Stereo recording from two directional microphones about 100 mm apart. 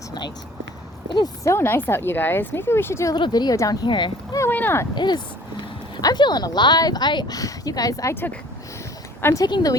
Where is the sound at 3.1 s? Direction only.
45° left (ahead or behind).